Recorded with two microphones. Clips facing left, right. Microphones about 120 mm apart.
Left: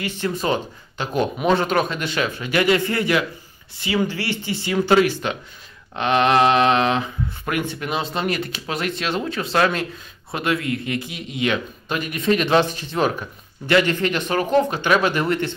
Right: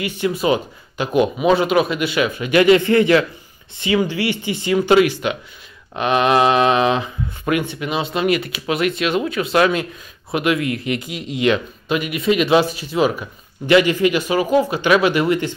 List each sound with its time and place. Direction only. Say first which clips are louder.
0.0 s speech: right 4 dB; 15° right (ahead or behind)
8.7 s speech: right 6 dB; 30° left (ahead or behind)
9.4 s speech: right 3 dB; 15° right (ahead or behind)